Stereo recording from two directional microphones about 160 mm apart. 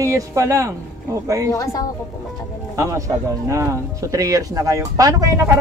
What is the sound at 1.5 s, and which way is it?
Speech, 20° left (ahead or behind).